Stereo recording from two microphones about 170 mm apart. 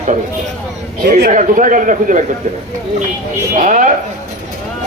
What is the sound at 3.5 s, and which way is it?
Speech, 50° right (ahead or behind).